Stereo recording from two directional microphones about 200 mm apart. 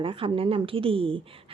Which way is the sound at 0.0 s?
25° right (ahead or behind).